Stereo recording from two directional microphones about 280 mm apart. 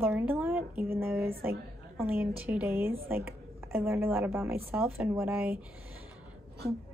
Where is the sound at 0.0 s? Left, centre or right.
Centre.